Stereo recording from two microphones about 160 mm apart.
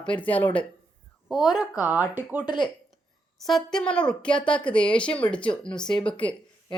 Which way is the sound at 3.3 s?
Centre (ahead or behind).